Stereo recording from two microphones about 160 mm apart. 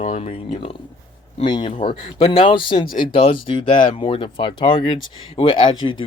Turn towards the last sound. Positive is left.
turn(degrees=30)  # may be behind; listen again after turning